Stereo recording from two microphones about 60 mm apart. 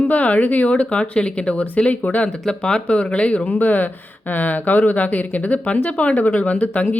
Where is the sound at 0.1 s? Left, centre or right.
Left.